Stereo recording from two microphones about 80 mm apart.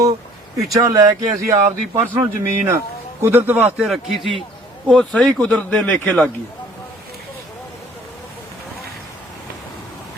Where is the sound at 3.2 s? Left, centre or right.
Right.